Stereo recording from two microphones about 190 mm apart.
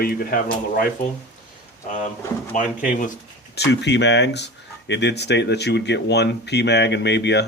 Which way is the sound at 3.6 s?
65° left (ahead or behind).